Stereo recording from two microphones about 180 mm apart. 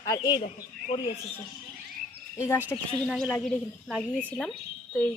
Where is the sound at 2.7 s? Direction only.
5° left (ahead or behind).